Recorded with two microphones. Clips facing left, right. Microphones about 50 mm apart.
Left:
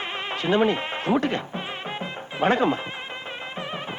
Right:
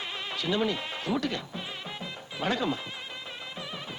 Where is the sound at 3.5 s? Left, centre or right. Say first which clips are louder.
Left 8 dB; left.